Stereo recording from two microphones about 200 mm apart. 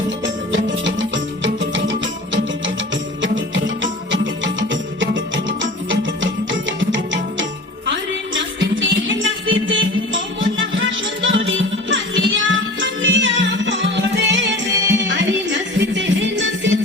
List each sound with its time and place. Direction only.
0.5 s music: 65° right (ahead or behind)
4.7 s music: 65° right (ahead or behind)
8.7 s music: 70° right (ahead or behind)